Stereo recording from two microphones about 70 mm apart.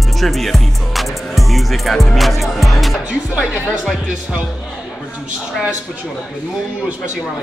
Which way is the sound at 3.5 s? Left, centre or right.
Centre.